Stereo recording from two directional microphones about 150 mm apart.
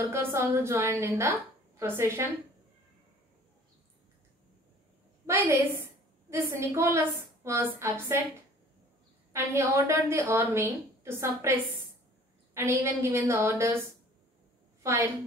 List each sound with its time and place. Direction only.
0.0 s a woman's voice: 15° right (ahead or behind)
5.2 s a woman's voice: 15° right (ahead or behind)
9.3 s a woman's voice: 15° right (ahead or behind)
14.8 s a woman's voice: 20° right (ahead or behind)